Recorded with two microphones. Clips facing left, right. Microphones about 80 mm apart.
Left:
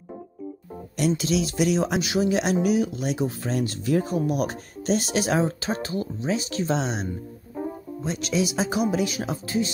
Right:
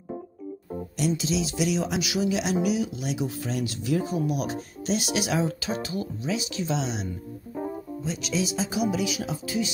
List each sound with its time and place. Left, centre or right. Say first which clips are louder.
0.9 s speech: left 3 dB; left